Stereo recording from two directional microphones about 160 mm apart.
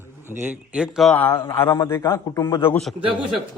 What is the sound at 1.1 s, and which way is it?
A man's voice, 15° left (ahead or behind).